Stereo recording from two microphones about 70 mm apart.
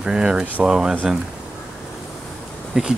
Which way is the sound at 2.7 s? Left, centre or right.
Centre.